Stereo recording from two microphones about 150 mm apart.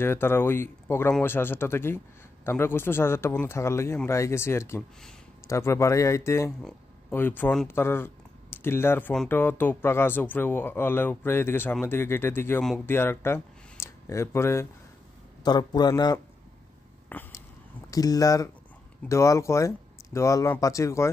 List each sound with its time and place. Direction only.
0.0 s speech: 15° left (ahead or behind)
15.4 s speech: 30° left (ahead or behind)
17.1 s a sound: 15° left (ahead or behind)
17.9 s speech: 25° left (ahead or behind)